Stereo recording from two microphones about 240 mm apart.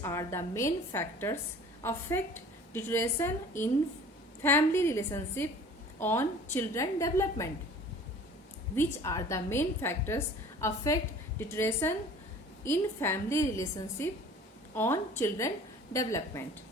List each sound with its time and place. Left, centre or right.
0.0 s a woman's voice: centre
8.7 s a woman's voice: centre